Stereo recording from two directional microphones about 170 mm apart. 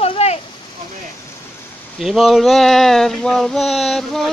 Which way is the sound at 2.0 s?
Centre (ahead or behind).